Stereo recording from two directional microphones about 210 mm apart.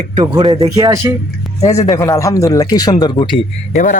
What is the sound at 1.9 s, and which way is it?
Speech, 15° left (ahead or behind).